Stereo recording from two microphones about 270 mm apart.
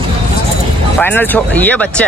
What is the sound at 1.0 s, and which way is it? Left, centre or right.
Speech, centre.